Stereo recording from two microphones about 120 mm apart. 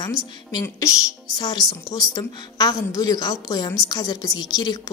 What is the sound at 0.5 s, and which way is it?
A woman's voice, 30° left (ahead or behind).